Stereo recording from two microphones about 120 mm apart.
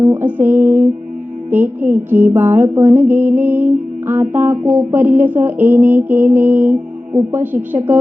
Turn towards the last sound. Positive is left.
turn(degrees=-15)  # may be behind; listen again after turning